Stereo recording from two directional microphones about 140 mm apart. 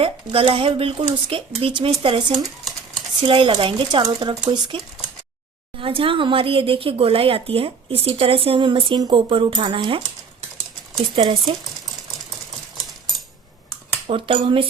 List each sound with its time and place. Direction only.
0.0 s speech: 40° right (ahead or behind)
11.2 s speech: 40° right (ahead or behind)
14.1 s speech: 40° right (ahead or behind)